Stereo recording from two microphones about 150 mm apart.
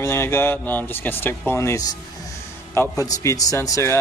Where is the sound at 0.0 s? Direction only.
20° left (ahead or behind).